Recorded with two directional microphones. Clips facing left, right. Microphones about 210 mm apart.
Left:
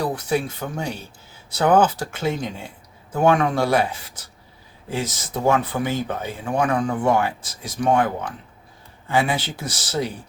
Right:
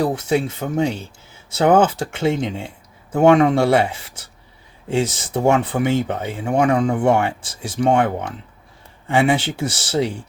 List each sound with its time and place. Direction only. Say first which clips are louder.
0.0 s speech: right 4 dB; 25° right (ahead or behind)